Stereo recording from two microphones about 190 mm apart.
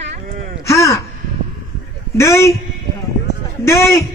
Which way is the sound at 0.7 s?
15° left (ahead or behind).